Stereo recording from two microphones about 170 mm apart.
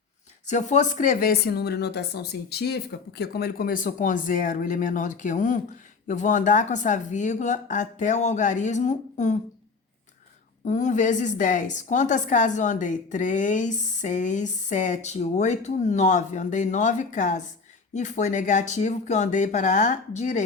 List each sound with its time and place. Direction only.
0.4 s a woman's voice: 45° left (ahead or behind)
10.6 s a woman's voice: 45° left (ahead or behind)